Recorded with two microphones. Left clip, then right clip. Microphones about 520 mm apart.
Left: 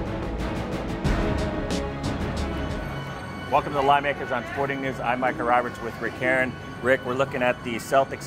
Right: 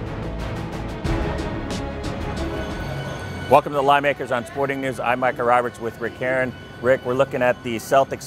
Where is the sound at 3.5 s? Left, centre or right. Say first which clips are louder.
Right 5 dB; right.